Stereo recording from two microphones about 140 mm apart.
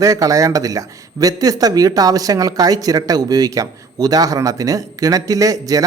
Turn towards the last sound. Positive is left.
turn(degrees=-25)  # may be behind; listen again after turning